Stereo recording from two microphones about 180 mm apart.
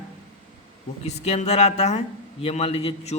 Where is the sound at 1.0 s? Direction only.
35° left (ahead or behind).